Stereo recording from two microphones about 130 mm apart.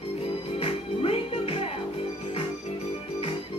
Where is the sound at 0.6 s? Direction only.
50° left (ahead or behind).